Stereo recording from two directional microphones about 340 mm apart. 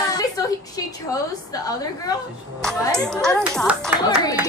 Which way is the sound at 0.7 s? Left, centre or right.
Centre.